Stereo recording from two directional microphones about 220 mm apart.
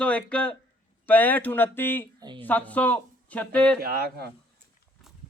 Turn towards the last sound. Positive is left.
turn(degrees=-45)  # may be behind; listen again after turning